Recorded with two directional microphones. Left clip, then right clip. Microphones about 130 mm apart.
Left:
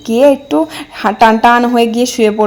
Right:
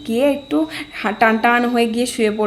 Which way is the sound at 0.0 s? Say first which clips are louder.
Left 9 dB; 40° left (ahead or behind).